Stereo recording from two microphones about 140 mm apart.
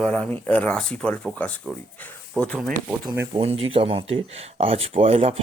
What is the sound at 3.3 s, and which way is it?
Speech, 40° right (ahead or behind).